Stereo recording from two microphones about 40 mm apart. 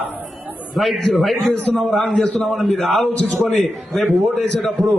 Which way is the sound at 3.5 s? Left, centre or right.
Centre.